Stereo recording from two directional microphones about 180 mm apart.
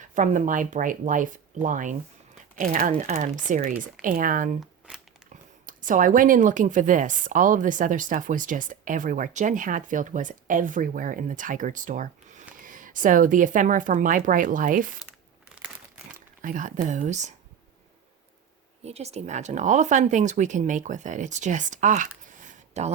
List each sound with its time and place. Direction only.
0.1 s a woman's voice: 45° right (ahead or behind)
5.6 s a woman's voice: 45° right (ahead or behind)
16.4 s a woman's voice: 45° right (ahead or behind)
18.9 s a woman's voice: 35° right (ahead or behind)
22.3 s a sound: 45° right (ahead or behind)